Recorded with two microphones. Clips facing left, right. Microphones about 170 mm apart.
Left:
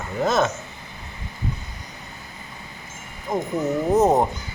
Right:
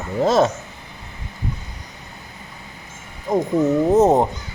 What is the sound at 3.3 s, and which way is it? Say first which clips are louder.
Speech: right 5 dB; 15° right (ahead or behind).